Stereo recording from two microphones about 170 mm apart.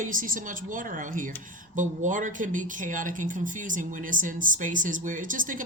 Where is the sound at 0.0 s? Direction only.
50° right (ahead or behind).